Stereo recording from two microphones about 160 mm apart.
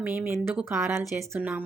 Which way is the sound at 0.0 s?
10° right (ahead or behind).